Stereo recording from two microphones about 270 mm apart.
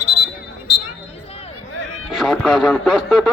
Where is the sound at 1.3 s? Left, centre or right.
Left.